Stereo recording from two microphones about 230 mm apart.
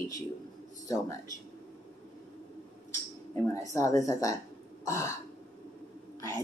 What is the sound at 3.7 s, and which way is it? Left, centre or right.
Speech, centre.